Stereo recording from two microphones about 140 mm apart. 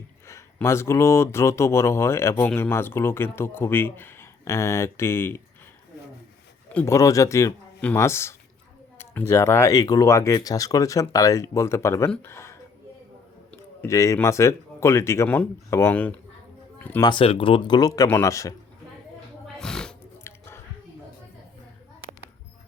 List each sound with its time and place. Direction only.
0.3 s speech: 20° left (ahead or behind)
6.7 s speech: 20° left (ahead or behind)
13.8 s speech: 20° left (ahead or behind)
16.7 s a sound: 15° left (ahead or behind)
17.0 s speech: 35° left (ahead or behind)
17.7 s speech: 25° left (ahead or behind)
19.5 s pig: 5° left (ahead or behind)
20.2 s biting: 15° left (ahead or behind)